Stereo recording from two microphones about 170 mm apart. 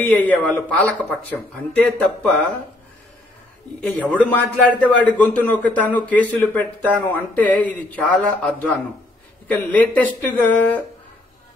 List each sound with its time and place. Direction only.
0.0 s a man's voice: 10° left (ahead or behind)
3.8 s a man's voice: 10° left (ahead or behind)